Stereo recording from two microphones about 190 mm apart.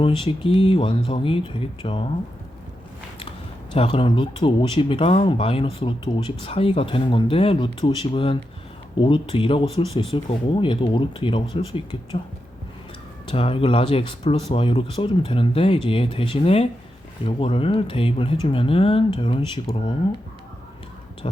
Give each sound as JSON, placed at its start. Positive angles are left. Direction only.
{"t": 0.0, "sound": "speech", "side_deg": 30}
{"t": 3.8, "sound": "speech", "side_deg": 25}
{"t": 13.3, "sound": "speech", "side_deg": 30}